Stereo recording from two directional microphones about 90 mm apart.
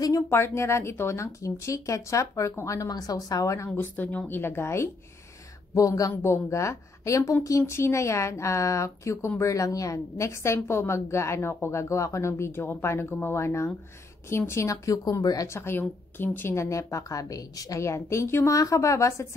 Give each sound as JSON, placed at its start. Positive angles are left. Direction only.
{"t": 0.0, "sound": "speech", "side_deg": 35}
{"t": 5.8, "sound": "speech", "side_deg": 40}